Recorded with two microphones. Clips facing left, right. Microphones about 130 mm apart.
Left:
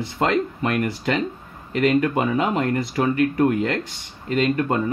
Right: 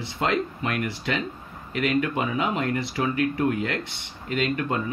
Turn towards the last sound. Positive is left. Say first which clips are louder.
# left 5 dB
turn(degrees=40)  # may be behind; listen again after turning